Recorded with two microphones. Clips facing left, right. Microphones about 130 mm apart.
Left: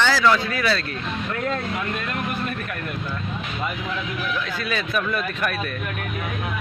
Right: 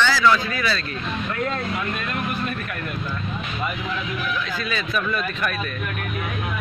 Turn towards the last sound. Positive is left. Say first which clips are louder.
# even
turn(degrees=55)  # may be behind; listen again after turning